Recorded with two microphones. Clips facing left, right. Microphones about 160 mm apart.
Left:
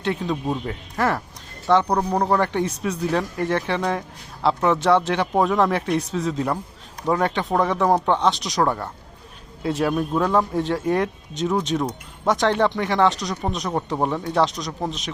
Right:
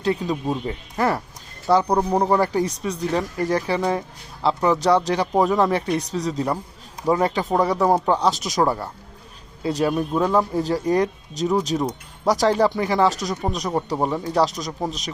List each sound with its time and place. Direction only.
0.0 s speech: centre (ahead or behind)